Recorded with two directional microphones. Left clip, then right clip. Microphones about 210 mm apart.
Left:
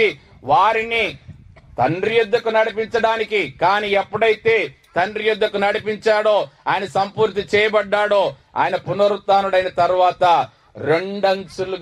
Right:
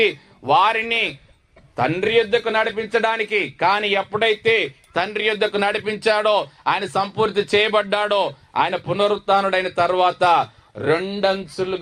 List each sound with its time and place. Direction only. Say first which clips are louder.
0.0 s a man's voice: left 1 dB; 25° right (ahead or behind)